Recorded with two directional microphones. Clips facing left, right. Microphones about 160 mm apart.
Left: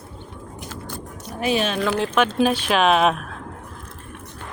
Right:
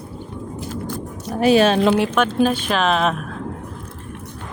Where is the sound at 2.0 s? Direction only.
10° left (ahead or behind).